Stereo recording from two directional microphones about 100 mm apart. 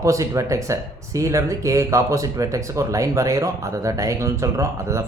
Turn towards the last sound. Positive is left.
turn(degrees=-30)  # may be behind; listen again after turning